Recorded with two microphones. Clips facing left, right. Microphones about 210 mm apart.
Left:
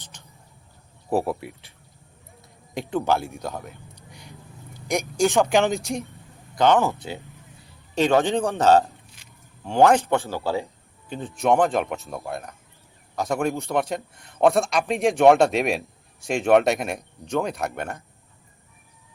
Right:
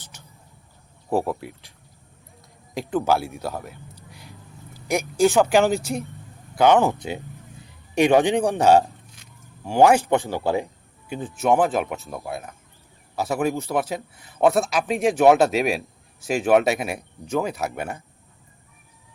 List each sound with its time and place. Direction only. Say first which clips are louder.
1.1 s a man's voice: even; 5° left (ahead or behind)
2.7 s speech: right 2 dB; centre (ahead or behind)
6.6 s a man's voice: right 2 dB; 15° right (ahead or behind)
11.3 s a man's voice: even; 5° right (ahead or behind)